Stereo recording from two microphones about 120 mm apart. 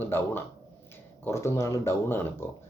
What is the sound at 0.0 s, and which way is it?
Speech, 20° left (ahead or behind).